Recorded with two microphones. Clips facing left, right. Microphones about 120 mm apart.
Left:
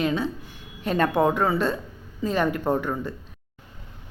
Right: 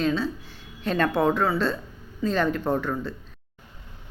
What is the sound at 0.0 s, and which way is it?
Speech, 15° left (ahead or behind).